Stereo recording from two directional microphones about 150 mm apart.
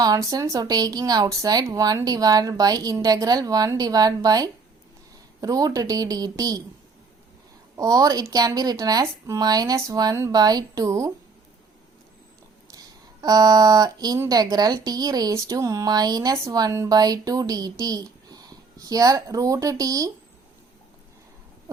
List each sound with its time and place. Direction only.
0.0 s speech: 25° right (ahead or behind)
7.8 s speech: 25° right (ahead or behind)
12.7 s speech: 25° right (ahead or behind)